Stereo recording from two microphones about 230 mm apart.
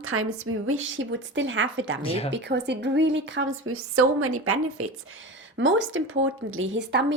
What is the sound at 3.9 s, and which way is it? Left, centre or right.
Speech, right.